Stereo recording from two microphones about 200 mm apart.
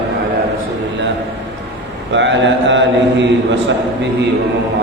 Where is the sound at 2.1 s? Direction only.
65° right (ahead or behind).